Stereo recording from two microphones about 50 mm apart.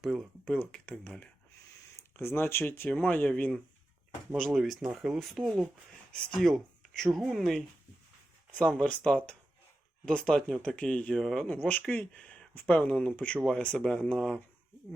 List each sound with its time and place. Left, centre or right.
0.0 s speech: centre
0.6 s speech: left
2.1 s speech: left
2.9 s speech: left
4.5 s speech: centre
5.2 s speech: centre
6.1 s speech: centre
8.9 s speech: left
11.1 s speech: centre
11.4 s speech: left